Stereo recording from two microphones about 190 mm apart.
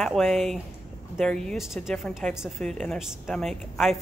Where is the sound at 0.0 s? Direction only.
Centre (ahead or behind).